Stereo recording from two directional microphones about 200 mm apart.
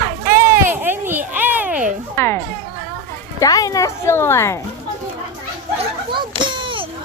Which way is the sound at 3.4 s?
15° left (ahead or behind).